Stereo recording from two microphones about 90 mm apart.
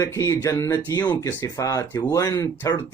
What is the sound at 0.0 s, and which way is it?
Speech, 35° left (ahead or behind).